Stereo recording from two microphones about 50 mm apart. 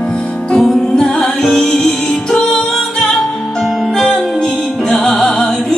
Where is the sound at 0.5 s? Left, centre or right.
Centre.